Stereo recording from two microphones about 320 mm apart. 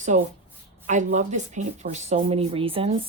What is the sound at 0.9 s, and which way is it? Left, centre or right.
A woman's voice, right.